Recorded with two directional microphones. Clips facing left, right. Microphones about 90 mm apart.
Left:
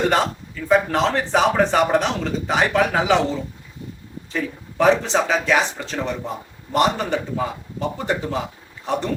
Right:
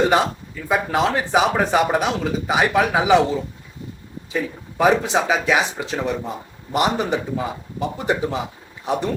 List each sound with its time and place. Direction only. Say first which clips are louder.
0.1 s speech: right 2 dB; 10° right (ahead or behind)
4.3 s speech: right 1 dB; 10° right (ahead or behind)